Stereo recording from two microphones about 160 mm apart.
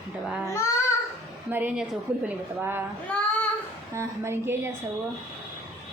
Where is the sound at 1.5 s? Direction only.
10° right (ahead or behind).